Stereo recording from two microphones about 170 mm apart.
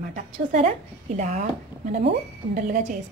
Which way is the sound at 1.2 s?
40° right (ahead or behind).